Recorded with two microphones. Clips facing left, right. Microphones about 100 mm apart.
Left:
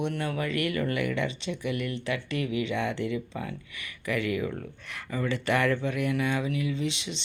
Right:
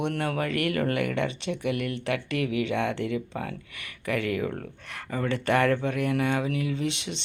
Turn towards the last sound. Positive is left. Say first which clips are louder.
# right 2 dB
turn(degrees=-55)  # may be behind; listen again after turning